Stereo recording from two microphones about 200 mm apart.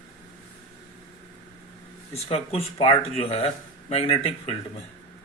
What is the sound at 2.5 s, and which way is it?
Speech, 30° left (ahead or behind).